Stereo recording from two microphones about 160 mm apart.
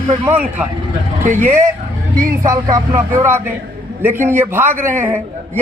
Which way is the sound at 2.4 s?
20° right (ahead or behind).